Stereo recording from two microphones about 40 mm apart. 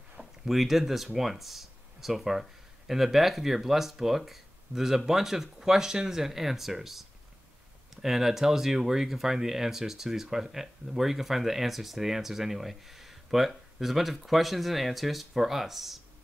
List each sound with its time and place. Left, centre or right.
0.2 s speech: centre